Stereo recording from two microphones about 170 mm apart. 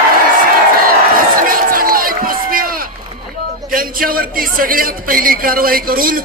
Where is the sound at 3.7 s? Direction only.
55° right (ahead or behind).